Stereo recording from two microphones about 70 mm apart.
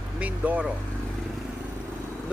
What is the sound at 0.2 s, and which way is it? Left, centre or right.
Speech, right.